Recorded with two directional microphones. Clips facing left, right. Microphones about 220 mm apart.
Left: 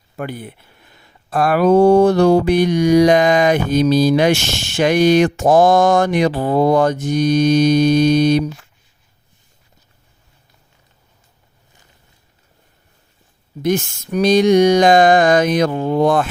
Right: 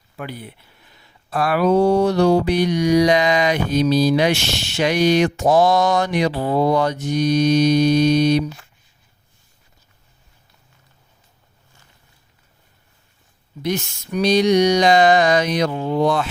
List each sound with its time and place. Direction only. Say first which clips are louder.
0.2 s speech: left 5 dB; 50° left (ahead or behind)
13.6 s speech: left 5 dB; 50° left (ahead or behind)